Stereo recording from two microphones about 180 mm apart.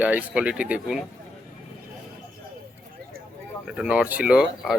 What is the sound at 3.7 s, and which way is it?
Speech, 5° right (ahead or behind).